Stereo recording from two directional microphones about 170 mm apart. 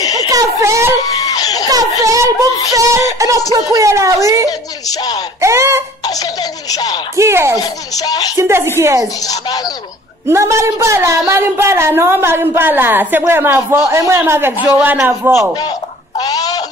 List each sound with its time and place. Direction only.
0.0 s a sound: 20° left (ahead or behind)
0.3 s a woman's voice: 20° right (ahead or behind)
1.2 s laughter: 20° left (ahead or behind)
1.7 s speech: 20° right (ahead or behind)
4.5 s speech: 20° left (ahead or behind)
5.4 s a woman's voice: 15° right (ahead or behind)
6.0 s speech: 20° left (ahead or behind)
7.2 s a woman's voice: 15° right (ahead or behind)
7.6 s speech: 20° left (ahead or behind)
8.4 s a woman's voice: 15° right (ahead or behind)
9.2 s speech: 20° left (ahead or behind)
10.2 s a woman's voice: 15° right (ahead or behind)
16.2 s a sound: 20° left (ahead or behind)